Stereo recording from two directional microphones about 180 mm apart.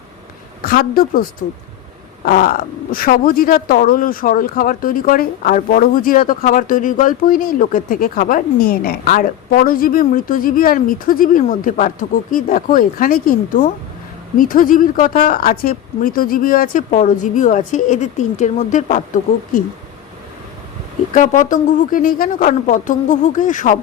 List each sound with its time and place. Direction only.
0.6 s a woman's voice: 55° left (ahead or behind)
21.1 s speech: 45° left (ahead or behind)